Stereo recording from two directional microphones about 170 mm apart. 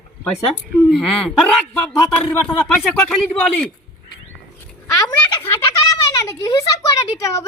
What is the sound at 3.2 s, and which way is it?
Speech, 5° left (ahead or behind).